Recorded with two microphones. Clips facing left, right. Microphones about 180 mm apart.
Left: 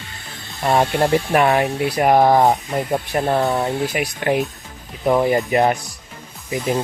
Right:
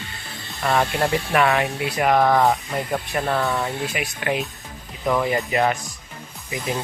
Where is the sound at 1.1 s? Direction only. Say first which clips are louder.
Left 3 dB; 40° left (ahead or behind).